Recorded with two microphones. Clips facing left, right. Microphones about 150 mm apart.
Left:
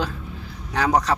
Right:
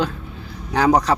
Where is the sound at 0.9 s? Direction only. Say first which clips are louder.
Right 4 dB; 10° right (ahead or behind).